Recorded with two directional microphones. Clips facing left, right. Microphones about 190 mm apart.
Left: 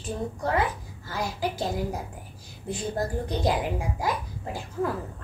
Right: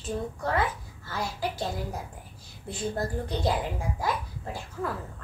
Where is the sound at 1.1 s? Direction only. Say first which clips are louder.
Left 2 dB; 15° left (ahead or behind).